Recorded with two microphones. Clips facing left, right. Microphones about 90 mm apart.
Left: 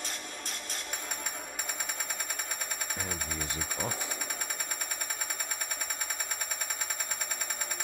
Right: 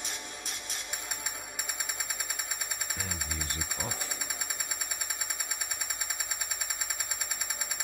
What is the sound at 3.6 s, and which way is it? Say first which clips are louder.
Speech: left 3 dB; 5° right (ahead or behind).